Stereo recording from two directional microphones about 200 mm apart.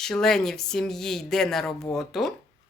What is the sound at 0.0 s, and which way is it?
Speech, 5° left (ahead or behind).